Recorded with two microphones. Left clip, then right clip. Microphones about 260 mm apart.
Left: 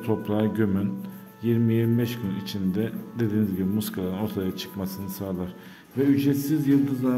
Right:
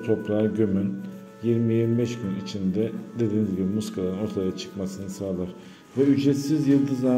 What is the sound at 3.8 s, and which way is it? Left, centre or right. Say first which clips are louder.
A man's voice: right 2 dB; centre.